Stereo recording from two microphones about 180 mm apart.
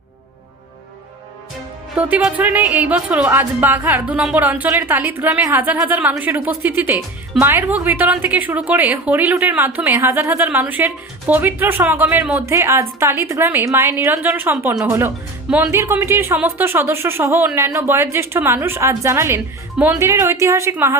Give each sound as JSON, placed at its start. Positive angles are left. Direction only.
{"t": 2.0, "sound": "a woman's voice", "side_deg": -10}